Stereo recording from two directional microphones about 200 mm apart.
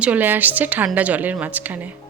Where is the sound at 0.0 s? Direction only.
10° right (ahead or behind).